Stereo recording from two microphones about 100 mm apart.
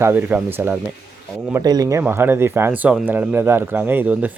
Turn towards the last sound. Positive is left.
turn(degrees=-15)  # may be behind; listen again after turning